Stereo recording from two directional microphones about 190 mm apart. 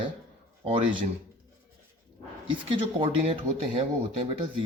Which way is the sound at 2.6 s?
30° right (ahead or behind).